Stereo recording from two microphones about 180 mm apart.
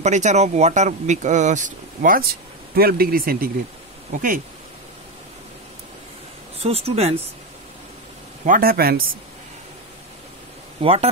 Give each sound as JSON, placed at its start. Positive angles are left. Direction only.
{"t": 0.0, "sound": "speech", "side_deg": -40}
{"t": 6.6, "sound": "speech", "side_deg": -35}
{"t": 8.5, "sound": "speech", "side_deg": -55}
{"t": 10.8, "sound": "speech", "side_deg": -35}